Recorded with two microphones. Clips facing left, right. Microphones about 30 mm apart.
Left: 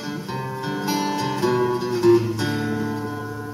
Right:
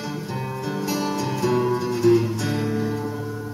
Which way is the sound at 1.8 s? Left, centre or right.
Left.